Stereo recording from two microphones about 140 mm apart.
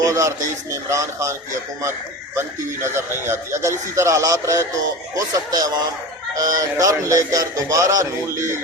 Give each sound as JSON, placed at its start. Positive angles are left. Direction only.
{"t": 0.0, "sound": "a man's voice", "side_deg": -20}